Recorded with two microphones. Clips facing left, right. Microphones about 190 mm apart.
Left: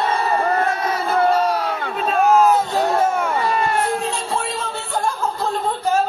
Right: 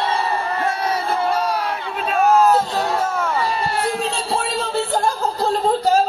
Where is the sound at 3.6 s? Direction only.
35° right (ahead or behind).